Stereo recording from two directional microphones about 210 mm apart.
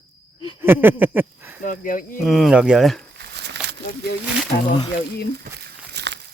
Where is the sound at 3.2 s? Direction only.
55° right (ahead or behind).